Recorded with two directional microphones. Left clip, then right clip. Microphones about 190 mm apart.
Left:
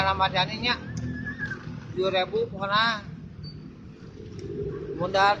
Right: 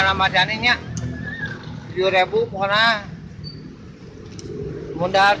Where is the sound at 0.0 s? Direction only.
Centre (ahead or behind).